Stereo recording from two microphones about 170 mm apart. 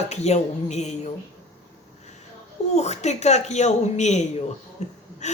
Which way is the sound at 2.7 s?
40° left (ahead or behind).